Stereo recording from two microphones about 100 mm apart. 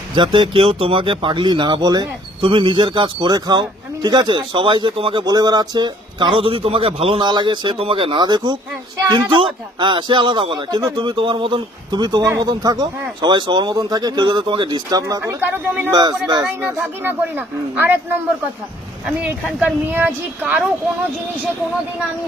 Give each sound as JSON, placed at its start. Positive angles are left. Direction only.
{"t": 0.3, "sound": "speech", "side_deg": -60}
{"t": 5.2, "sound": "speech", "side_deg": -40}
{"t": 7.3, "sound": "speech", "side_deg": -50}
{"t": 15.2, "sound": "speech", "side_deg": -20}
{"t": 15.9, "sound": "speech", "side_deg": -45}
{"t": 16.6, "sound": "speech", "side_deg": -15}
{"t": 19.3, "sound": "speech", "side_deg": -15}